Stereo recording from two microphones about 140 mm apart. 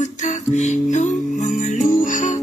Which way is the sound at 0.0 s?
55° left (ahead or behind).